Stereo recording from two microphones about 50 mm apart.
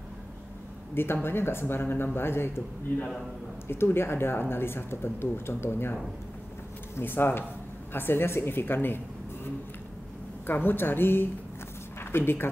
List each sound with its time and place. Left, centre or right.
0.9 s speech: left
3.6 s speech: left
7.0 s speech: left
10.4 s a woman's voice: left